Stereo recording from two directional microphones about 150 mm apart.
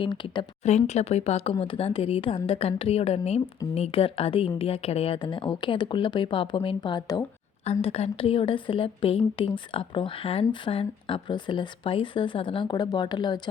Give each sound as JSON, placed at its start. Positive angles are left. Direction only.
{"t": 0.0, "sound": "a woman's voice", "side_deg": 30}
{"t": 0.6, "sound": "a woman's voice", "side_deg": 50}
{"t": 7.6, "sound": "a woman's voice", "side_deg": 40}